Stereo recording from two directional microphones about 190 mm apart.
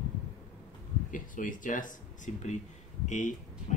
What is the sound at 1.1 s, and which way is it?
Speech, 45° left (ahead or behind).